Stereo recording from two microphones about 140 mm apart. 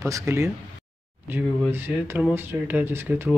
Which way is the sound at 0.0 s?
20° right (ahead or behind).